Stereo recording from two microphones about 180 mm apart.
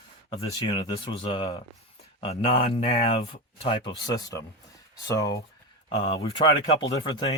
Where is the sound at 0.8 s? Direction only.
30° left (ahead or behind).